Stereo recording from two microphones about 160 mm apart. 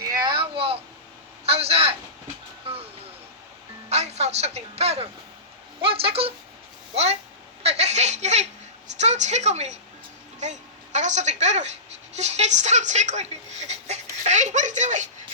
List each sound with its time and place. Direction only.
0.1 s a sound: 25° right (ahead or behind)
2.7 s vehicle: 35° right (ahead or behind)
3.8 s music: 45° right (ahead or behind)
5.8 s speech: 35° right (ahead or behind)
7.6 s a sound: 40° right (ahead or behind)
9.0 s a woman's voice: 45° right (ahead or behind)